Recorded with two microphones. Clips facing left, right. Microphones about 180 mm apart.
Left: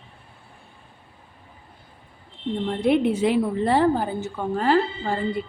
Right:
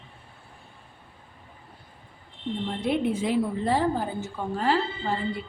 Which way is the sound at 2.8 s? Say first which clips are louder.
Left 6 dB; 70° left (ahead or behind).